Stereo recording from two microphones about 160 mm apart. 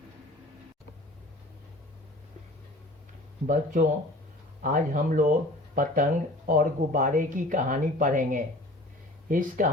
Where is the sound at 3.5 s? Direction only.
55° right (ahead or behind).